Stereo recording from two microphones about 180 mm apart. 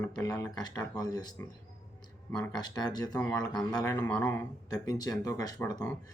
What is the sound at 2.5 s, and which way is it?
Speech, 25° left (ahead or behind).